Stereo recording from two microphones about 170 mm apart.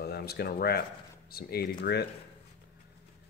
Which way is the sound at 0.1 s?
70° left (ahead or behind).